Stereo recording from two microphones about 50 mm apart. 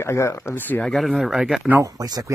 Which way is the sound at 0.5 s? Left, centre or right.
Left.